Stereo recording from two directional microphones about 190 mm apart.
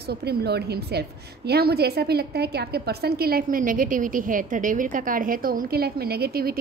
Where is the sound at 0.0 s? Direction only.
55° right (ahead or behind).